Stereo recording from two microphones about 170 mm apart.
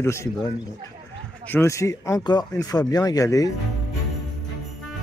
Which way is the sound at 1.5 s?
15° left (ahead or behind).